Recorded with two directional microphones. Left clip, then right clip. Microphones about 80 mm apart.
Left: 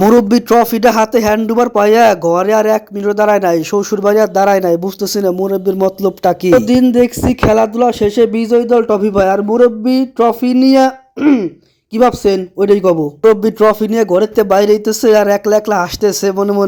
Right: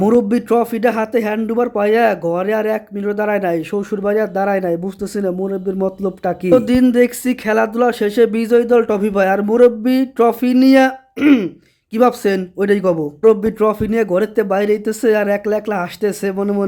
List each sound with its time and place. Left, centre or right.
0.0 s speech: left
1.5 s speech: centre
6.9 s speech: left
9.4 s speech: centre
11.2 s a sound: centre
11.9 s speech: left
13.6 s speech: left